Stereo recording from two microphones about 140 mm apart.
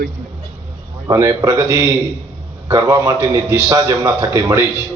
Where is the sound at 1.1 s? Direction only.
20° right (ahead or behind).